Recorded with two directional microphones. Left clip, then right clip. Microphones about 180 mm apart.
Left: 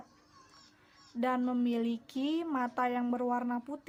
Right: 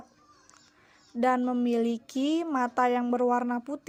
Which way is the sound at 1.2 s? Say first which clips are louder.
Right 6 dB; 30° right (ahead or behind).